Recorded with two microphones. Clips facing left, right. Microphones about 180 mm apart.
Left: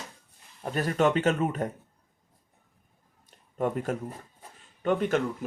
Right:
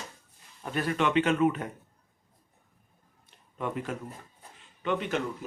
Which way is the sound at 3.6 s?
45° left (ahead or behind).